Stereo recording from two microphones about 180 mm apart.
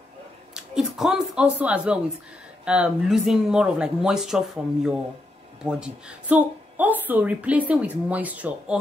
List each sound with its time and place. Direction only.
0.6 s a woman's voice: centre (ahead or behind)